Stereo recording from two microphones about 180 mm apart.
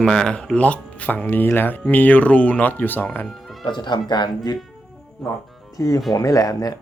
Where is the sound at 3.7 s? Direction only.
25° left (ahead or behind).